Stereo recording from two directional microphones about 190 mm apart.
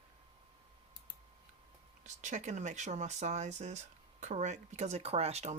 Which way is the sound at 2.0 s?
40° right (ahead or behind).